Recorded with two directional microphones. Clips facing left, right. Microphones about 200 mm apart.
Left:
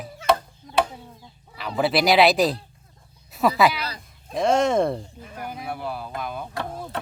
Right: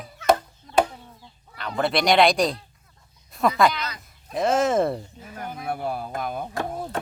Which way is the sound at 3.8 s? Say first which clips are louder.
Left 1 dB; 30° left (ahead or behind).